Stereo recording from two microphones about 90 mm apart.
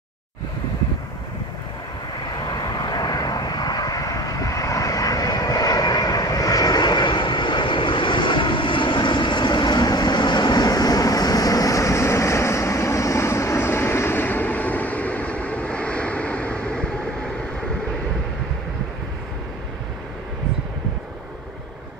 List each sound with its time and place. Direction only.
2.2 s vehicle: 50° left (ahead or behind); by 16.8 s 15° left (ahead or behind)